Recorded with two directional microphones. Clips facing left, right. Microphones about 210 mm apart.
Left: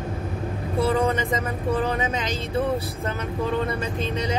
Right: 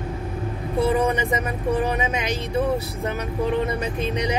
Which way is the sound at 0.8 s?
15° right (ahead or behind).